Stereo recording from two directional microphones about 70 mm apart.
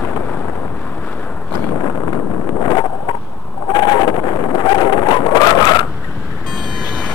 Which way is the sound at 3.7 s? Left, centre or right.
Left.